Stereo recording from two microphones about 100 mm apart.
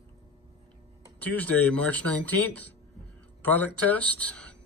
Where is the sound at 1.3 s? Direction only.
15° left (ahead or behind).